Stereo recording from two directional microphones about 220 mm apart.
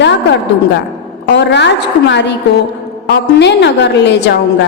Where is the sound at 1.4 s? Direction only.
50° left (ahead or behind).